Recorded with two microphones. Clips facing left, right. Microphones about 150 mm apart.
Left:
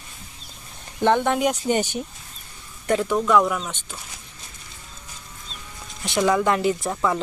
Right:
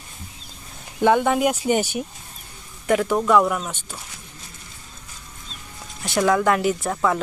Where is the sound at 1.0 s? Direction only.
10° right (ahead or behind).